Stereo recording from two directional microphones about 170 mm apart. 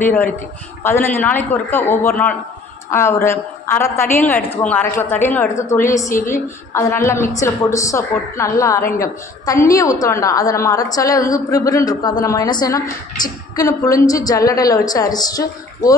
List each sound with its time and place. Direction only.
0.8 s a woman's voice: 10° left (ahead or behind)